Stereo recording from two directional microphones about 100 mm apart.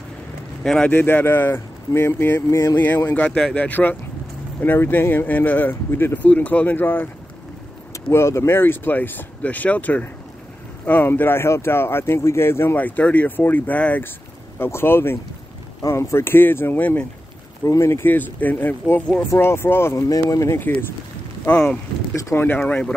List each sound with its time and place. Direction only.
0.7 s speech: 10° left (ahead or behind)
17.6 s speech: 30° left (ahead or behind)
19.4 s speech: 25° left (ahead or behind)
21.5 s speech: 10° left (ahead or behind)
22.1 s speech: 35° left (ahead or behind)
22.4 s speech: 20° left (ahead or behind)